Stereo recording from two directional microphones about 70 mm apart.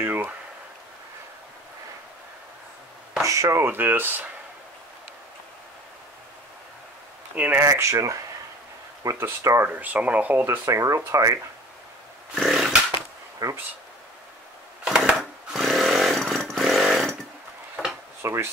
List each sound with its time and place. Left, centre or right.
0.0 s a sound: right
3.3 s speech: right
3.5 s speech: right
7.3 s speech: right
7.7 s speech: right
9.2 s speech: right
9.7 s speech: right
10.6 s speech: right
12.4 s chainsaw: centre
13.4 s speech: right
14.9 s chainsaw: centre
18.2 s speech: right